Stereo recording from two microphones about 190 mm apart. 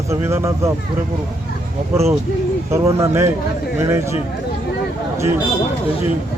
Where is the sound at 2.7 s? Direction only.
15° right (ahead or behind).